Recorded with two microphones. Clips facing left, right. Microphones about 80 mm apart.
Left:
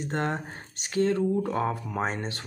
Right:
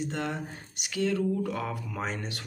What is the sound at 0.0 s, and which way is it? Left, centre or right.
Speech, left.